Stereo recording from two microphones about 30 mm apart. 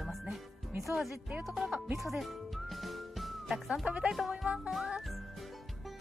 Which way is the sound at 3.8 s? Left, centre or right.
Right.